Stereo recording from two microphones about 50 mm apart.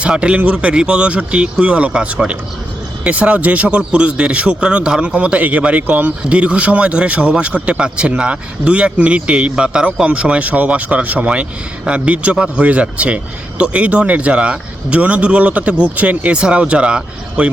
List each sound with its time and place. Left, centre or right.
0.2 s a man's voice: right